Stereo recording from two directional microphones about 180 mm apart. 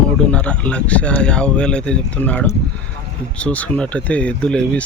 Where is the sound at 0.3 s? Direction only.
5° left (ahead or behind).